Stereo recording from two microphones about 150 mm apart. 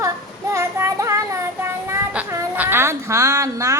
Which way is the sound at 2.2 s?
15° right (ahead or behind).